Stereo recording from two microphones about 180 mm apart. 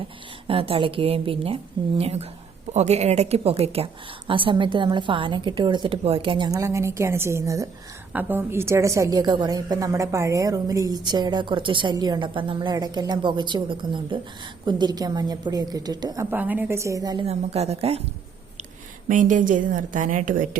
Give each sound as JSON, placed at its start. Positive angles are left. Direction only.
{"t": 0.4, "sound": "a woman's voice", "side_deg": -30}
{"t": 17.2, "sound": "a woman's voice", "side_deg": -35}
{"t": 19.0, "sound": "a woman's voice", "side_deg": -45}